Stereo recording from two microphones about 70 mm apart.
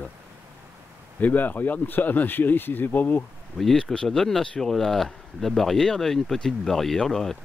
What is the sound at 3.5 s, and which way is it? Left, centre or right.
Speech, centre.